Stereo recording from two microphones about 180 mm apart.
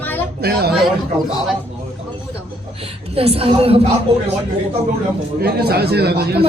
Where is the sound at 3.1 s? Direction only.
35° right (ahead or behind).